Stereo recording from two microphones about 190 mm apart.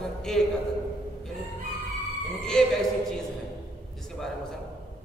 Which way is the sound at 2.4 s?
5° left (ahead or behind).